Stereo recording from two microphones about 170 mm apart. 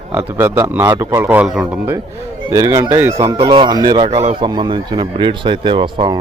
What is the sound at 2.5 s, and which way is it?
Speech, 15° right (ahead or behind).